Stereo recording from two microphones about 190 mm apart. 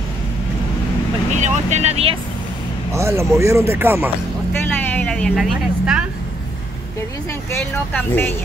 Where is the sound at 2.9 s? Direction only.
15° right (ahead or behind).